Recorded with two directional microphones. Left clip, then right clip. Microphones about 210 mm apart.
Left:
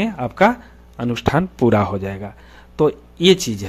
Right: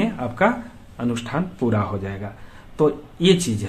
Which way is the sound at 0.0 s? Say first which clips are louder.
Left 4 dB; 45° left (ahead or behind).